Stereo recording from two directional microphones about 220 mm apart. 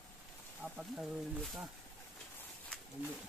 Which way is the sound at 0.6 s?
Centre (ahead or behind).